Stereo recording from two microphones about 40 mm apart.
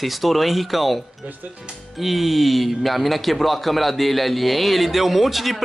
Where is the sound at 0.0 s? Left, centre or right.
Centre.